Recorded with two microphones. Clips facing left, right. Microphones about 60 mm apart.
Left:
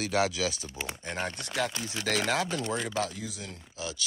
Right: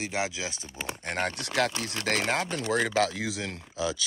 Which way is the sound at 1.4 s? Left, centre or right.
Right.